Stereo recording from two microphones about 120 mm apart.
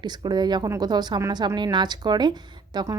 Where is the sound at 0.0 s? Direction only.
35° right (ahead or behind).